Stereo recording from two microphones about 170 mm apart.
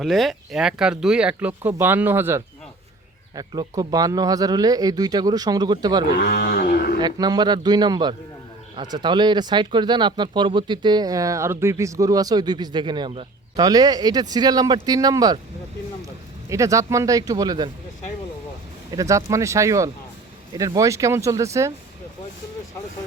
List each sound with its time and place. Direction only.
0.0 s speech: centre (ahead or behind); by 6.1 s 25° right (ahead or behind)
6.1 s speech: 60° left (ahead or behind)
7.0 s speech: 25° right (ahead or behind)
16.5 s speech: 20° right (ahead or behind)
18.9 s speech: 20° right (ahead or behind)